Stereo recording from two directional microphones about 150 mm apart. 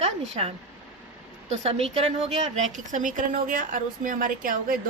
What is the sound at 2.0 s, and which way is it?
A woman's voice, 50° right (ahead or behind).